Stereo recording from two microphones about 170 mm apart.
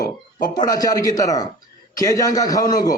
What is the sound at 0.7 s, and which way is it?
A man's voice, 20° left (ahead or behind).